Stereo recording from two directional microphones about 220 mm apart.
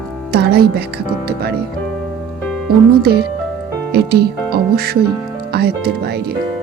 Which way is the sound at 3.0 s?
45° right (ahead or behind).